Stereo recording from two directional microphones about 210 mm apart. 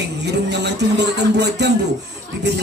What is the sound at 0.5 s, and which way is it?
A man's voice, 55° right (ahead or behind).